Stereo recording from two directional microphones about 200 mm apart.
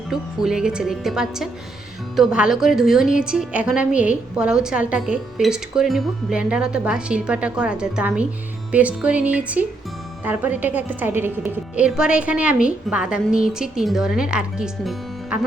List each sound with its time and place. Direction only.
0.1 s a woman's voice: 5° right (ahead or behind)